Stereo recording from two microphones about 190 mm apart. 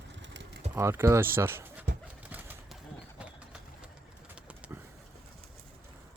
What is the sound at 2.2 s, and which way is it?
Bird, 10° right (ahead or behind).